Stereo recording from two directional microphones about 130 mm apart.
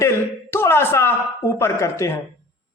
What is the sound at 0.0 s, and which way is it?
Speech, 20° left (ahead or behind).